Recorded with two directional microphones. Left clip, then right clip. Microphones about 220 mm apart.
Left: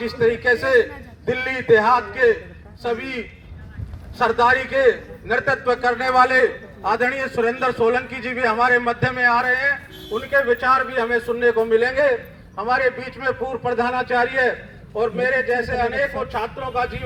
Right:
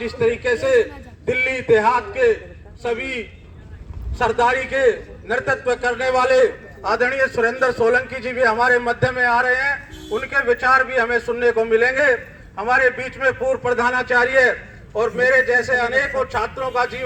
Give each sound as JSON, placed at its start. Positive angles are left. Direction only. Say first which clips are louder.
{"t": 0.0, "sound": "a man's voice", "louder": "left 1 dB", "side_deg": -20}
{"t": 4.2, "sound": "a man's voice", "louder": "left 1 dB", "side_deg": -25}